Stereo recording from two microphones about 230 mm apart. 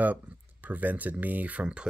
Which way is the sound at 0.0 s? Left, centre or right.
Centre.